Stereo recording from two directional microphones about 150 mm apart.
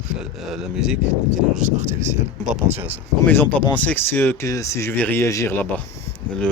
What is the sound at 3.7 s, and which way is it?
Speech, 10° left (ahead or behind).